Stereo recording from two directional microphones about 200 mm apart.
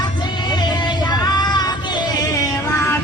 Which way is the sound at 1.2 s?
20° left (ahead or behind).